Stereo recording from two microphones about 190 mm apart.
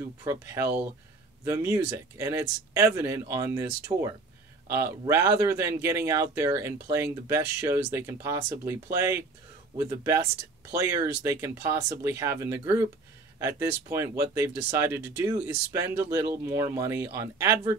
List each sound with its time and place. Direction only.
0.2 s speech: 15° right (ahead or behind)